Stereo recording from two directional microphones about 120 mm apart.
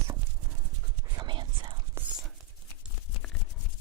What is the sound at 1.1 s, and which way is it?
Whispering, 40° right (ahead or behind).